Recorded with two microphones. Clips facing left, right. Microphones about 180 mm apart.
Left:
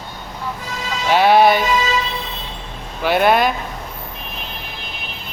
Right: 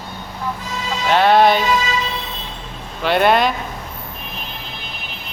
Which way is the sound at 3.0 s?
5° left (ahead or behind).